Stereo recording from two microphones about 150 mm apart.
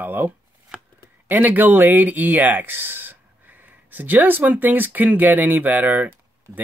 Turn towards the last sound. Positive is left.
turn(degrees=-10)  # may be behind; listen again after turning